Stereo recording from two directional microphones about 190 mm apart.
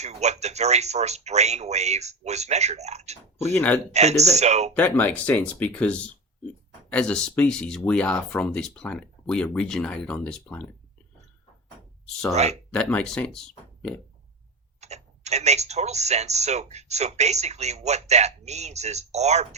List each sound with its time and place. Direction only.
0.0 s speech: 35° right (ahead or behind)
3.4 s speech: 10° left (ahead or behind)
3.9 s speech: 35° right (ahead or behind)
4.8 s speech: 10° left (ahead or behind)
12.3 s speech: 35° right (ahead or behind)
12.7 s speech: 5° left (ahead or behind)
14.8 s speech: 35° right (ahead or behind)